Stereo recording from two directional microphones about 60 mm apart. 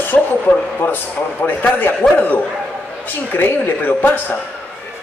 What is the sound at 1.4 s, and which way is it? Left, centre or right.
A man's voice, left.